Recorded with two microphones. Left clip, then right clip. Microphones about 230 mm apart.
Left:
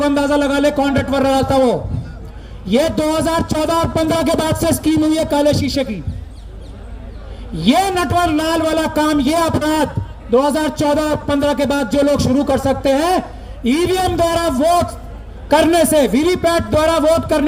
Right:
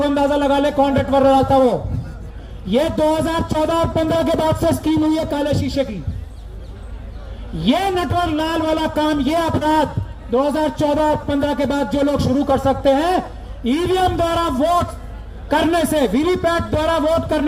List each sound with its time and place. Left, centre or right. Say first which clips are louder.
0.0 s a man's voice: left 1 dB; left
7.6 s a man's voice: left 3 dB; left